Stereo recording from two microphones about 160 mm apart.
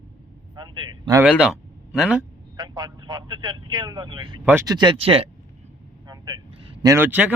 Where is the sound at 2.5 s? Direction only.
25° right (ahead or behind).